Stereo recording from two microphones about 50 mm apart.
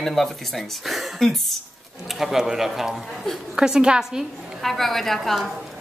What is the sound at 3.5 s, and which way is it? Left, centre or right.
A woman's voice, centre.